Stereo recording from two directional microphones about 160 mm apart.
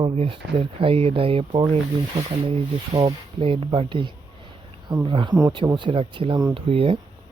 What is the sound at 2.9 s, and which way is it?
Speech, 35° right (ahead or behind).